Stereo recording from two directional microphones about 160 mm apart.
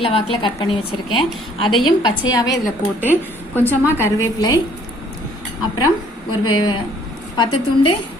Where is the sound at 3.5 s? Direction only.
10° left (ahead or behind).